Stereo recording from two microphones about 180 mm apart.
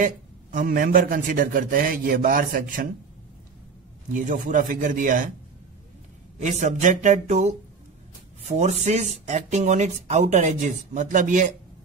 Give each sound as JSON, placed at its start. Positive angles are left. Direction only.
{"t": 0.0, "sound": "a man's voice", "side_deg": -45}
{"t": 4.1, "sound": "a man's voice", "side_deg": -45}
{"t": 6.4, "sound": "speech", "side_deg": -40}